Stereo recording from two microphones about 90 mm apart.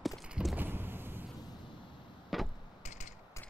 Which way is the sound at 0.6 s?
25° right (ahead or behind).